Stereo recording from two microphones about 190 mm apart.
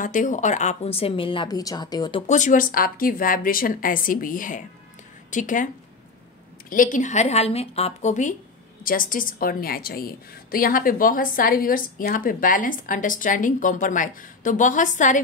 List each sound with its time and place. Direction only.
0.0 s a woman's voice: 45° left (ahead or behind); by 2.2 s 25° left (ahead or behind)
2.2 s a woman's voice: 40° left (ahead or behind)
6.7 s a woman's voice: 45° left (ahead or behind)